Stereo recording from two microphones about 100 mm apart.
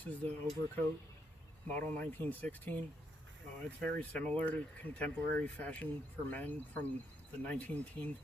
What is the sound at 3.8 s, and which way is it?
Speech, 10° left (ahead or behind).